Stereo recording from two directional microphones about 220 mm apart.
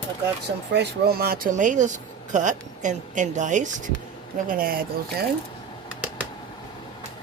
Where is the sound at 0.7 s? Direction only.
45° right (ahead or behind).